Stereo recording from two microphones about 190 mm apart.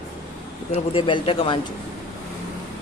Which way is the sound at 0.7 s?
30° left (ahead or behind).